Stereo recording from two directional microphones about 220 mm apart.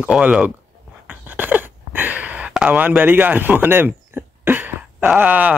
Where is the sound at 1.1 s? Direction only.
5° right (ahead or behind).